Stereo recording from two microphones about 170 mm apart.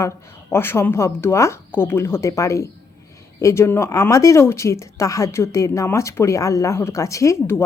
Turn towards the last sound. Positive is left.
turn(degrees=15)  # may be behind; listen again after turning